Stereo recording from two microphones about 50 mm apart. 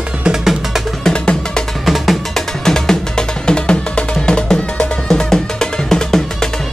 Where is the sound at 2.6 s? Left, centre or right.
Centre.